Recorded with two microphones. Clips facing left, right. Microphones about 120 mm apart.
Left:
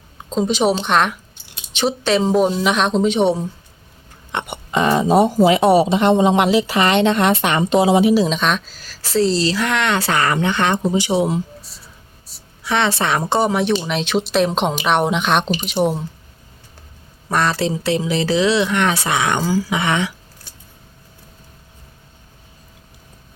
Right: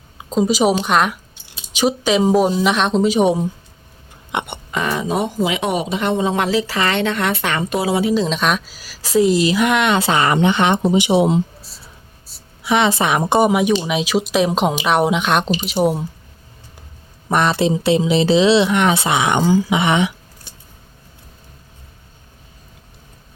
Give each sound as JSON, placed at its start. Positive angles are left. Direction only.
{"t": 0.2, "sound": "speech", "side_deg": -5}
{"t": 4.3, "sound": "a sound", "side_deg": -15}
{"t": 4.7, "sound": "speech", "side_deg": 30}
{"t": 8.1, "sound": "speech", "side_deg": 5}
{"t": 12.6, "sound": "speech", "side_deg": -15}
{"t": 17.2, "sound": "speech", "side_deg": -20}